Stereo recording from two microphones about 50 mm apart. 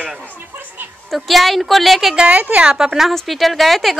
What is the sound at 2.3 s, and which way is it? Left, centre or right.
Speech, right.